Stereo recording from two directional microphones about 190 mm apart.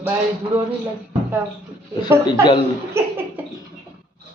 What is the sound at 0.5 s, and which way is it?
Music, 5° right (ahead or behind).